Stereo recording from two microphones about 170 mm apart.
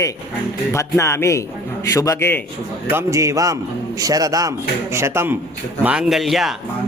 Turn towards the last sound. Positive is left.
turn(degrees=0)  # may be behind; listen again after turning